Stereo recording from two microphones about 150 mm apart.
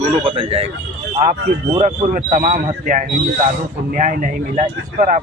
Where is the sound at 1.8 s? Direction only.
60° right (ahead or behind).